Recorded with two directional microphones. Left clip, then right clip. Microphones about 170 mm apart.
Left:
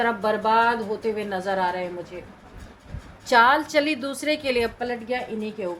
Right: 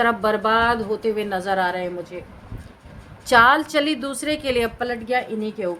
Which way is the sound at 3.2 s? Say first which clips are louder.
Right 3 dB; 25° right (ahead or behind).